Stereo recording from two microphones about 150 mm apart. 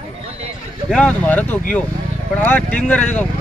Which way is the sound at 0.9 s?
5° left (ahead or behind).